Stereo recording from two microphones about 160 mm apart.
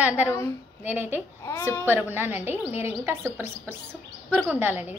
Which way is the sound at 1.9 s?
15° right (ahead or behind).